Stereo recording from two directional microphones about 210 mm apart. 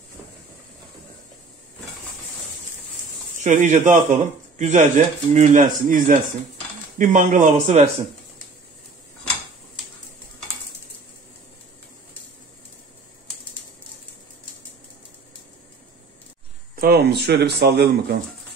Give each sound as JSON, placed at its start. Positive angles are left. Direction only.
{"t": 3.4, "sound": "speech", "side_deg": -35}
{"t": 16.7, "sound": "speech", "side_deg": -45}